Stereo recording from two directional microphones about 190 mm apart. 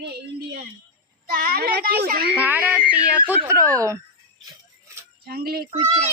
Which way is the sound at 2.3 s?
10° right (ahead or behind).